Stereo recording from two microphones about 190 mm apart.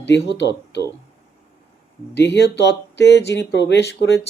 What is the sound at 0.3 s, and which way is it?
Speech, 65° left (ahead or behind).